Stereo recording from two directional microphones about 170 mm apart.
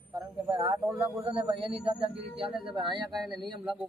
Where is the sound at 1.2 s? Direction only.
30° right (ahead or behind).